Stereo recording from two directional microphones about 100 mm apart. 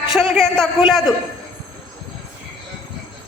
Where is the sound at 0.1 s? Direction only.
Centre (ahead or behind).